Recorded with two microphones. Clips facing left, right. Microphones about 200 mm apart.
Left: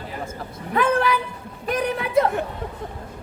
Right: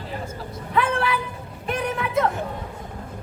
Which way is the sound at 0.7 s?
40° left (ahead or behind).